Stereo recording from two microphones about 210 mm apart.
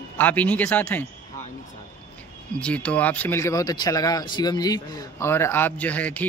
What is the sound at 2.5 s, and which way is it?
Speech, 5° left (ahead or behind).